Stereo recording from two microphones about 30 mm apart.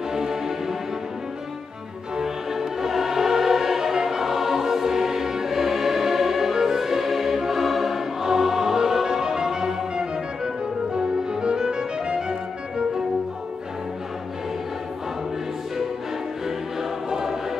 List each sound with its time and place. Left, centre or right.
0.1 s music: centre
2.1 s music: centre
17.1 s choir: centre